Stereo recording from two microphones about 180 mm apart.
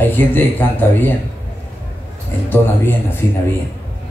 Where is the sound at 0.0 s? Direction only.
10° left (ahead or behind).